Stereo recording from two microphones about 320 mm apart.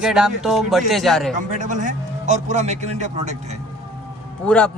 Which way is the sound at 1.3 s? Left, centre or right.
Right.